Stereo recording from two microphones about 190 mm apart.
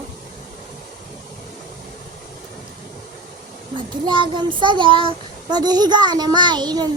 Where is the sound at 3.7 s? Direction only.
25° right (ahead or behind).